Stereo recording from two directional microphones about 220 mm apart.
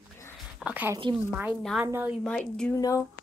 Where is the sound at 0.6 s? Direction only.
5° right (ahead or behind).